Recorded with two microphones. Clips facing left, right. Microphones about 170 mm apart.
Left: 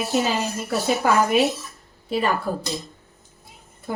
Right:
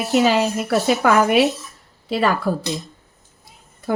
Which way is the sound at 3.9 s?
80° right.